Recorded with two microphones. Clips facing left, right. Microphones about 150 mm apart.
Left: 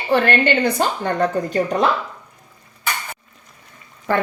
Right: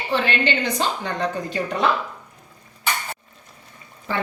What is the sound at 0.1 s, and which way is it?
A woman's voice, 55° left (ahead or behind).